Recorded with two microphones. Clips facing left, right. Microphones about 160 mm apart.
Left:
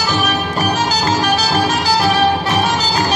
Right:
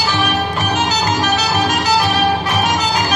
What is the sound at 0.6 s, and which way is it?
Music, 35° left (ahead or behind).